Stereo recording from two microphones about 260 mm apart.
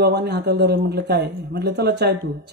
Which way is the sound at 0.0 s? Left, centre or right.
Right.